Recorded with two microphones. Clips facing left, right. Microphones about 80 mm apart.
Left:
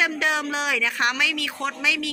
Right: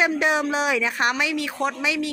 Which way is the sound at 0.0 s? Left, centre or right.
Right.